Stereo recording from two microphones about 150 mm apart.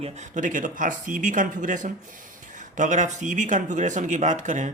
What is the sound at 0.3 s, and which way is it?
Speech, 60° right (ahead or behind).